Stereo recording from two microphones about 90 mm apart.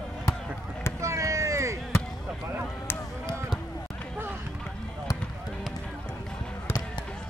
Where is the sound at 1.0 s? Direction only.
35° right (ahead or behind).